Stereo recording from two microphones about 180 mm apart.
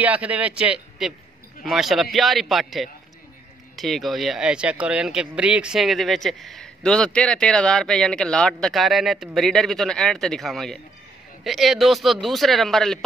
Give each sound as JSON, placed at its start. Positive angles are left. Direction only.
{"t": 0.0, "sound": "a man's voice", "side_deg": -5}